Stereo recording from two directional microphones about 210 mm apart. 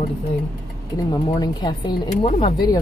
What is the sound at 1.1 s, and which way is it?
Speech, 25° left (ahead or behind).